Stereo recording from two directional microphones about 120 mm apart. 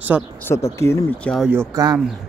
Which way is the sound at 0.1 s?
15° right (ahead or behind).